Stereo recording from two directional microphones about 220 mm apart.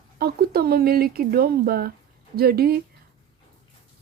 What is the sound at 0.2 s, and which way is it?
Speech, 45° right (ahead or behind).